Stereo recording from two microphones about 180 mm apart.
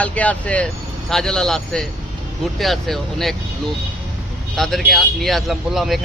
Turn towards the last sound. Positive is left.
turn(degrees=0)  # may be behind; listen again after turning